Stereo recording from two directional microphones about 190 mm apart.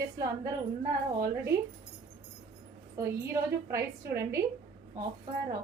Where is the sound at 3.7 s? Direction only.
15° right (ahead or behind).